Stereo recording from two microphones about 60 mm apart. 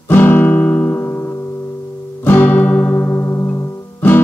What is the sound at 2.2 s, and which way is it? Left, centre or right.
Music, left.